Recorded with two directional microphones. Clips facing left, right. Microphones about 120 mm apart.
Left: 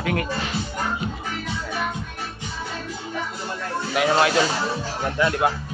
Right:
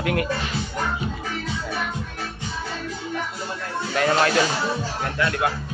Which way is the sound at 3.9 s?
10° left (ahead or behind).